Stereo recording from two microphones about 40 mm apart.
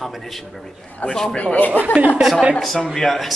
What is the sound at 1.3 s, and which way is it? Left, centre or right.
Speech, left.